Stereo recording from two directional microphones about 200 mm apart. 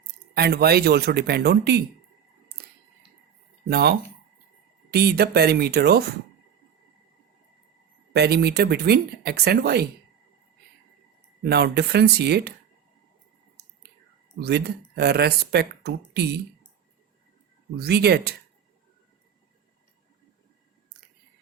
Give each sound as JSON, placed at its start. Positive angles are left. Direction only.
{"t": 0.3, "sound": "speech", "side_deg": -50}
{"t": 3.7, "sound": "speech", "side_deg": -55}
{"t": 8.1, "sound": "speech", "side_deg": -55}
{"t": 11.4, "sound": "speech", "side_deg": -55}
{"t": 14.3, "sound": "speech", "side_deg": -55}
{"t": 17.7, "sound": "speech", "side_deg": -55}